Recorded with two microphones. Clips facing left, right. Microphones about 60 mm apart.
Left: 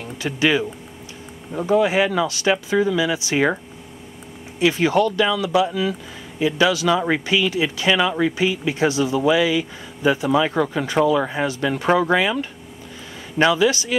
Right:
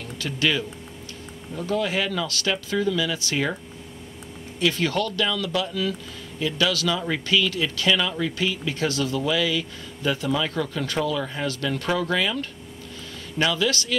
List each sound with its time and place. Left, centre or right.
0.2 s speech: centre
4.6 s speech: centre
13.5 s speech: centre